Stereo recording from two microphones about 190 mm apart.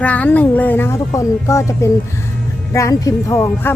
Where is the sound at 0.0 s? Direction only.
5° left (ahead or behind).